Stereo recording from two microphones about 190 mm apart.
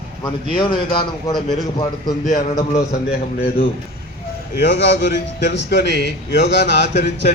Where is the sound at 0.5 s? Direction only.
25° left (ahead or behind).